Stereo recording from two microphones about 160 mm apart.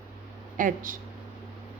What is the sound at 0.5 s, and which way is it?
Speech, 60° right (ahead or behind).